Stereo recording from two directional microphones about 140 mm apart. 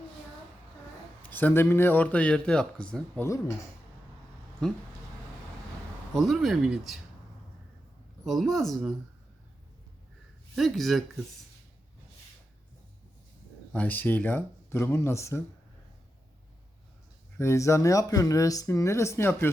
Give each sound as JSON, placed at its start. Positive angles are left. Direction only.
{"t": 1.2, "sound": "a man's voice", "side_deg": 10}
{"t": 3.2, "sound": "speech", "side_deg": 20}
{"t": 4.6, "sound": "speech", "side_deg": 0}
{"t": 6.1, "sound": "speech", "side_deg": 0}
{"t": 8.2, "sound": "speech", "side_deg": 0}
{"t": 10.5, "sound": "speech", "side_deg": 0}
{"t": 13.7, "sound": "a man's voice", "side_deg": 10}
{"t": 17.3, "sound": "speech", "side_deg": 20}